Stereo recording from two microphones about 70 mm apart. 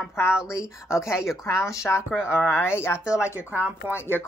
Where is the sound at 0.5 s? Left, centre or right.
Left.